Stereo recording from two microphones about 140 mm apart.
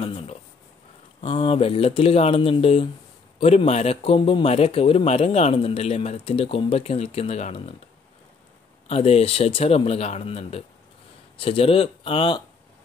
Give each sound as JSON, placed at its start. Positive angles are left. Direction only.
{"t": 0.0, "sound": "a sound", "side_deg": 40}
{"t": 1.2, "sound": "speech", "side_deg": 40}
{"t": 8.8, "sound": "speech", "side_deg": 45}